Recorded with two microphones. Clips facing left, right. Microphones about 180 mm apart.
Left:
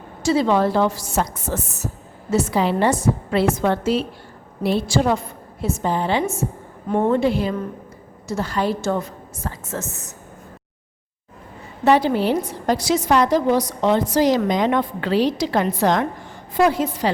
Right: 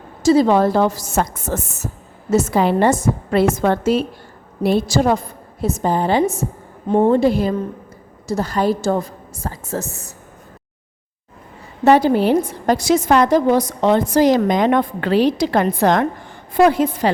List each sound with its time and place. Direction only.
0.2 s a woman's voice: 40° right (ahead or behind)
11.9 s a woman's voice: 45° right (ahead or behind)